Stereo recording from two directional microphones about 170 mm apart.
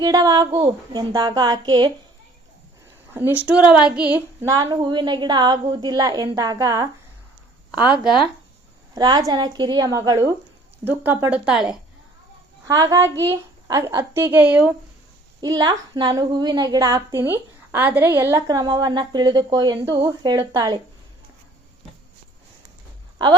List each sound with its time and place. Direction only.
0.0 s a woman's voice: 25° right (ahead or behind)
3.1 s a woman's voice: 10° right (ahead or behind)
7.7 s speech: 5° right (ahead or behind)
9.0 s a woman's voice: 25° right (ahead or behind); by 11.8 s 5° right (ahead or behind)
12.6 s a woman's voice: 20° right (ahead or behind)
15.4 s a woman's voice: 25° right (ahead or behind)